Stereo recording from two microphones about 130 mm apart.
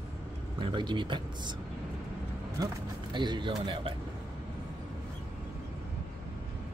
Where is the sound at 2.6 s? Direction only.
35° right (ahead or behind).